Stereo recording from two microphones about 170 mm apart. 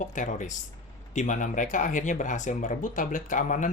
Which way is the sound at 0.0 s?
45° left (ahead or behind).